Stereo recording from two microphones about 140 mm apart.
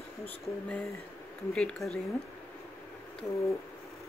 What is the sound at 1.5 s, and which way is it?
Speech, 5° left (ahead or behind).